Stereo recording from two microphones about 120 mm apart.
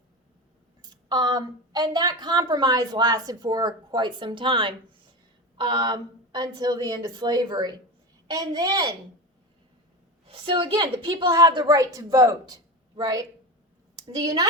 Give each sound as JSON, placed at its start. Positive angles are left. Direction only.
{"t": 0.8, "sound": "a woman's voice", "side_deg": -35}
{"t": 10.2, "sound": "a woman's voice", "side_deg": -50}